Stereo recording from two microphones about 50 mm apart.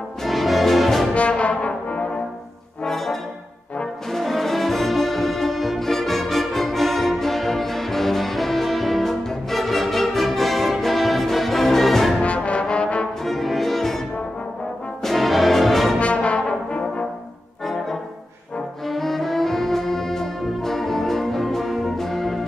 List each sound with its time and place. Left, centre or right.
0.2 s music: centre
1.1 s brass instrument: left
2.8 s brass instrument: centre
12.2 s brass instrument: left
13.2 s music: centre
15.0 s brass instrument: centre
16.0 s brass instrument: left
18.9 s brass instrument: centre